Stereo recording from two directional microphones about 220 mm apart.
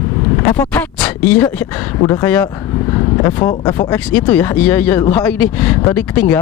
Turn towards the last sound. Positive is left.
turn(degrees=10)  # may be behind; listen again after turning